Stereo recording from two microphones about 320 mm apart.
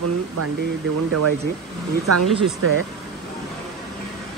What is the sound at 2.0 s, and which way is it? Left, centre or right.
Speech, right.